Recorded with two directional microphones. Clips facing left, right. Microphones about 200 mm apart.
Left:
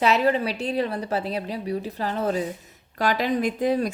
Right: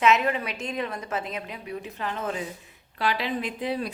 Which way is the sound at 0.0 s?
35° left (ahead or behind).